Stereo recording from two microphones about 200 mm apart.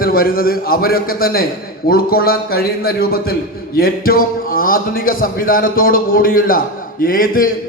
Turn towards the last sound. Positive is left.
turn(degrees=45)  # may be behind; listen again after turning